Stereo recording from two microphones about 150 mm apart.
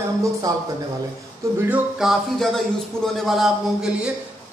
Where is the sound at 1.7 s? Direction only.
5° right (ahead or behind).